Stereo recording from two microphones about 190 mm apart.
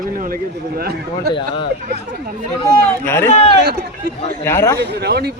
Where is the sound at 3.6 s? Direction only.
60° right (ahead or behind).